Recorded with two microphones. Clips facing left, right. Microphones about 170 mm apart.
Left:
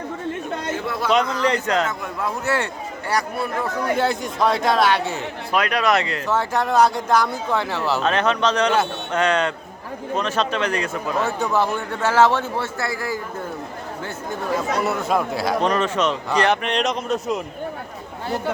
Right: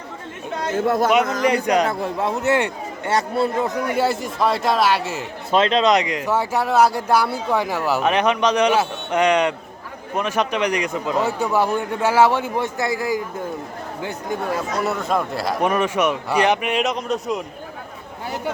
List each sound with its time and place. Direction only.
0.8 s speech: 45° right (ahead or behind)
1.4 s speech: 15° right (ahead or behind)
1.9 s speech: 30° right (ahead or behind)
3.9 s speech: 5° right (ahead or behind)
5.5 s speech: 25° right (ahead or behind)
14.8 s speech: centre (ahead or behind)
15.6 s speech: 10° right (ahead or behind)